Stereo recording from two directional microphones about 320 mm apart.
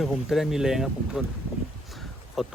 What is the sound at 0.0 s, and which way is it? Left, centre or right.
Speech, centre.